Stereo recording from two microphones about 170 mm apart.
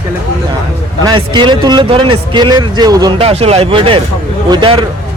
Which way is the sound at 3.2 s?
35° right (ahead or behind).